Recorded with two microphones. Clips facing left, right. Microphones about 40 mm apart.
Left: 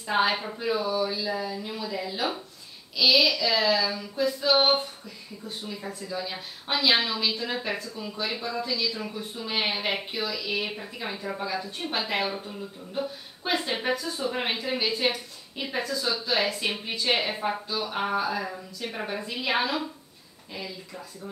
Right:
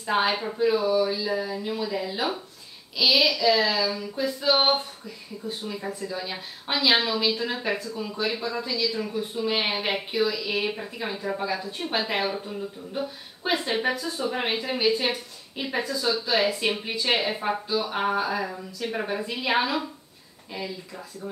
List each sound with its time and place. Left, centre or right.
0.1 s a child's voice: centre
4.1 s speech: centre
8.4 s speech: right
8.6 s a child's voice: centre
9.4 s speech: centre